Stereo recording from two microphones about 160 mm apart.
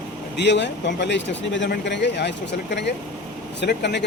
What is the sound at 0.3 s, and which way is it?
Speech, 90° left.